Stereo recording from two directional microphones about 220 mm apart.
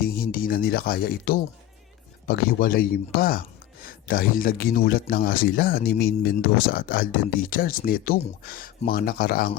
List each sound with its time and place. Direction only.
0.0 s speech: 40° left (ahead or behind)